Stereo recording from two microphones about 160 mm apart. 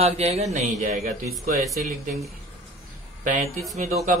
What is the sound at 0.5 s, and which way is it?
Speech, 55° right (ahead or behind).